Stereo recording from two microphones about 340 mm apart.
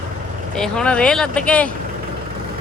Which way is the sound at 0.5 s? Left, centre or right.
Centre.